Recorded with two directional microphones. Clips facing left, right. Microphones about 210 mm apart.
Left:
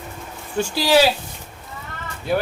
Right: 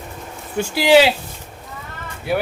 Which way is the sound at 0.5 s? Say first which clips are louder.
Right 3 dB; 15° right (ahead or behind).